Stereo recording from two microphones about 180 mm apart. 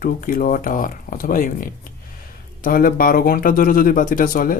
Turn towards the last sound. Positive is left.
turn(degrees=50)  # may be behind; listen again after turning